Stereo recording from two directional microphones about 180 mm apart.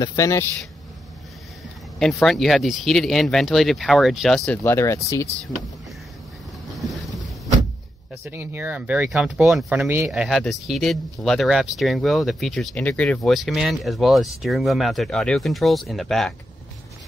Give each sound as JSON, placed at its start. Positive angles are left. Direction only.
{"t": 0.0, "sound": "a man's voice", "side_deg": 20}
{"t": 2.2, "sound": "speech", "side_deg": 0}
{"t": 6.8, "sound": "boat", "side_deg": 0}
{"t": 8.2, "sound": "speech", "side_deg": -10}